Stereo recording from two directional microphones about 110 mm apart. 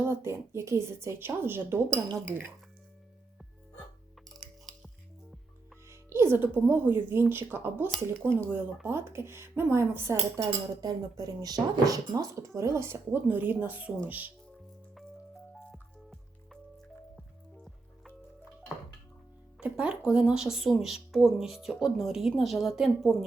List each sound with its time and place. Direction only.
0.1 s speech: 25° right (ahead or behind)
5.9 s speech: 25° right (ahead or behind)
10.3 s speech: 35° right (ahead or behind); by 14.3 s 15° right (ahead or behind)
15.5 s drip: centre (ahead or behind)
19.5 s speech: 10° right (ahead or behind)